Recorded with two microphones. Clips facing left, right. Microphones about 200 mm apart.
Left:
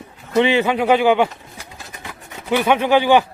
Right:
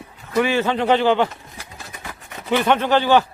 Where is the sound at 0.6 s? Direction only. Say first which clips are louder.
Left 2 dB; 10° left (ahead or behind).